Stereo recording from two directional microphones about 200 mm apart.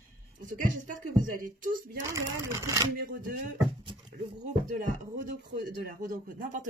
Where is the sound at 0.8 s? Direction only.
45° right (ahead or behind).